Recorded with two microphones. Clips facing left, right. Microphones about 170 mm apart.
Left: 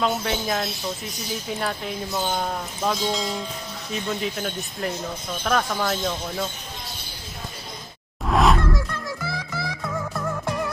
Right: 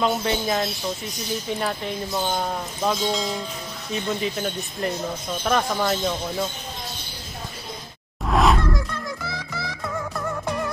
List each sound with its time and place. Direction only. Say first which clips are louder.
0.0 s speech: right 2 dB; centre (ahead or behind)
8.3 s music: even; centre (ahead or behind)